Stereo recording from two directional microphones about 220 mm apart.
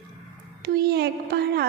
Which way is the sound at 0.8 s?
45° right (ahead or behind).